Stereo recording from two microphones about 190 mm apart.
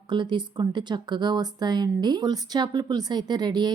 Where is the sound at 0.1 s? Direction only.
25° right (ahead or behind).